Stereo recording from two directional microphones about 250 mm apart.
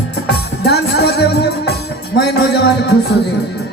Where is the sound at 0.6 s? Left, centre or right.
Left.